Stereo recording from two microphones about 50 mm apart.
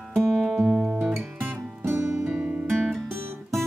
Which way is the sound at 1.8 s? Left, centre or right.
Right.